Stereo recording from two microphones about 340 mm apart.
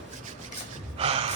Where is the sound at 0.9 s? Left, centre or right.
Centre.